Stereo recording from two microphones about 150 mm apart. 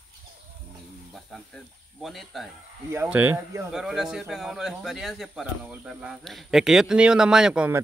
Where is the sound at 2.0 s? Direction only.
Centre (ahead or behind).